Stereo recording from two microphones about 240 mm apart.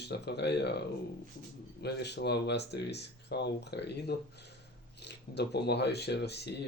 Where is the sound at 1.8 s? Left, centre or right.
Left.